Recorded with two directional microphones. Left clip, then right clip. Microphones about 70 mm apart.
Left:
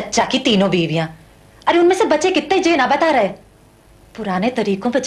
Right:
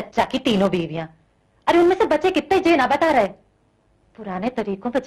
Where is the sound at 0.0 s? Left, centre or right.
Left.